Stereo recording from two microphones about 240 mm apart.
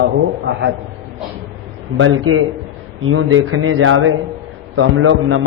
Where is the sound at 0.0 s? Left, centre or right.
Right.